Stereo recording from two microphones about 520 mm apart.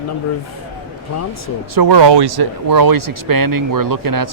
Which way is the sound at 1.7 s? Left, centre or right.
Right.